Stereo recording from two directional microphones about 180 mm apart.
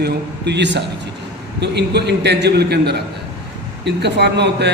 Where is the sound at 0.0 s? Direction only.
65° right (ahead or behind).